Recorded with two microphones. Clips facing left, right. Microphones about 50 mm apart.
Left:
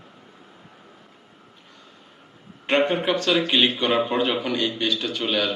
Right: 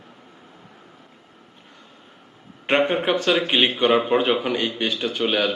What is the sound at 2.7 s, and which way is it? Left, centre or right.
A man's voice, centre.